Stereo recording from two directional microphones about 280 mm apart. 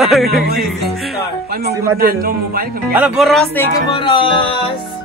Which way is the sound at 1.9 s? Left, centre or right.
Right.